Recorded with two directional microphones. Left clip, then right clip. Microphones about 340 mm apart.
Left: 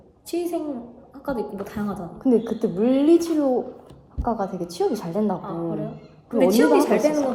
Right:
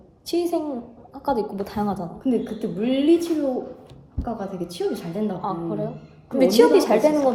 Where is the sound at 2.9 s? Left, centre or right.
Centre.